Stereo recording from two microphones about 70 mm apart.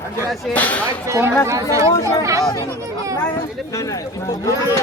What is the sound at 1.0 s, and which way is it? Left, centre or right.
Speech, right.